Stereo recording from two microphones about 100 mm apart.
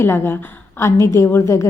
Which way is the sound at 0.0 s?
25° left (ahead or behind).